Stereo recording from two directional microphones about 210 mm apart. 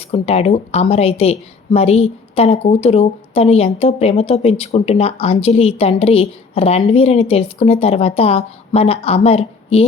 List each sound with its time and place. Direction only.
0.1 s a woman's voice: 30° left (ahead or behind)